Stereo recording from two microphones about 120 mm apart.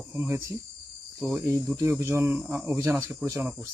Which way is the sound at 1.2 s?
Centre (ahead or behind).